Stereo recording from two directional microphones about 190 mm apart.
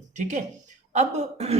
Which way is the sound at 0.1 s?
40° right (ahead or behind).